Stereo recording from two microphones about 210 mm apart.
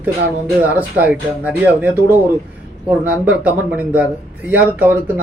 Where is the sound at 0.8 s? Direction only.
5° right (ahead or behind).